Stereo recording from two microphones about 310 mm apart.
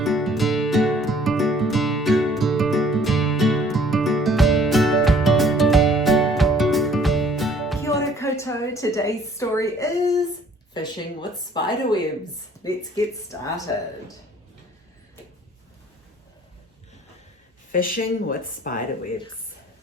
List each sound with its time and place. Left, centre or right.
0.0 s music: centre
10.8 s speech: centre
17.7 s speech: left